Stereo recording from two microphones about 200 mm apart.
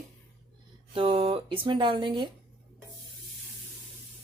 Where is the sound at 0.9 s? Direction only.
25° right (ahead or behind).